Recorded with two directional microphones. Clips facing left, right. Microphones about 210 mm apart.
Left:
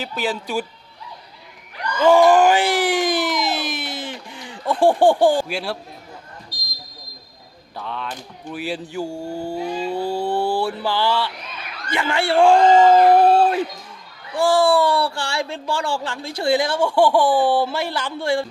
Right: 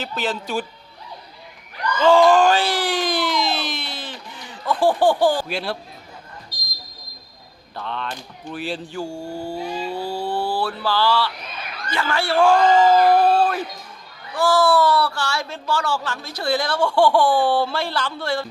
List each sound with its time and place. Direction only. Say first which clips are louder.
0.0 s speech: left 1 dB; 10° left (ahead or behind)
2.0 s a sound: left 1 dB; 15° left (ahead or behind)
4.7 s speech: left 2 dB; 25° left (ahead or behind)
5.5 s a man's voice: even; 5° left (ahead or behind)
7.8 s speech: even; 5° left (ahead or behind)
9.3 s a sound: left 3 dB; 10° right (ahead or behind)
9.9 s mantra: left 4 dB; 20° left (ahead or behind)
11.9 s speech: left 2 dB; 20° left (ahead or behind)
18.2 s speech: left 6 dB; 25° left (ahead or behind)